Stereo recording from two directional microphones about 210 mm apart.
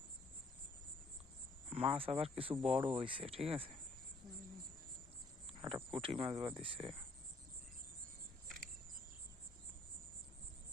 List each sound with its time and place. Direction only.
1.7 s speech: 25° right (ahead or behind)
5.6 s a sound: 25° right (ahead or behind)
6.0 s speech: 25° right (ahead or behind)